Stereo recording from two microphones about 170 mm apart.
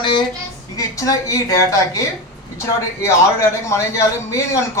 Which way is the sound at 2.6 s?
15° left (ahead or behind).